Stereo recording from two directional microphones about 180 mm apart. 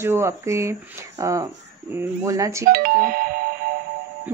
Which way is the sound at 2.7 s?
50° right (ahead or behind).